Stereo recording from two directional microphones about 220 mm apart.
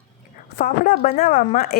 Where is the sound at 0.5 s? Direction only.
45° left (ahead or behind).